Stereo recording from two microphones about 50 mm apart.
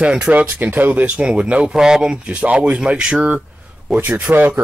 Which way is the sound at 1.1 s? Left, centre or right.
Right.